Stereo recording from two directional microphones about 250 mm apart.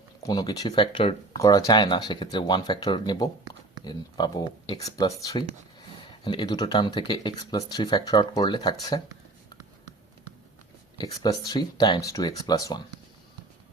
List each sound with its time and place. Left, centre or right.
0.2 s speech: centre
10.9 s speech: centre